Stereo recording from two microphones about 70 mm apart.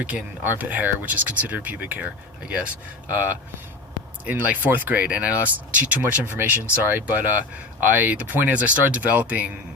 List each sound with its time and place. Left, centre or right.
0.0 s speech: right